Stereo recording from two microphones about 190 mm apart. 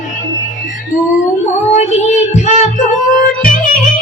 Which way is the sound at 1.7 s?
35° left (ahead or behind).